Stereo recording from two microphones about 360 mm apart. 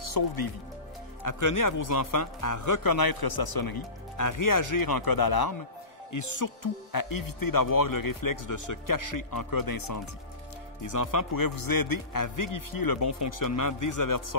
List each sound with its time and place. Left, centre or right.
0.2 s a man's voice: left
1.2 s a man's voice: left
6.1 s speech: left
10.8 s speech: left
13.0 s speech: left